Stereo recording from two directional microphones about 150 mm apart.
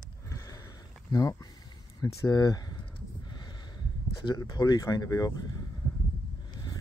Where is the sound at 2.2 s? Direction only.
25° left (ahead or behind).